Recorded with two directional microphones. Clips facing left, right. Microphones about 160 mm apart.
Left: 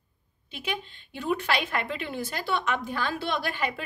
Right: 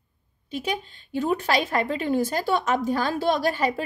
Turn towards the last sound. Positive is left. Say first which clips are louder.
# right 7 dB
turn(degrees=-40)  # may be behind; listen again after turning